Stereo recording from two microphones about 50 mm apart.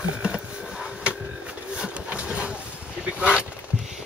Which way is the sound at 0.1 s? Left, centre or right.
Right.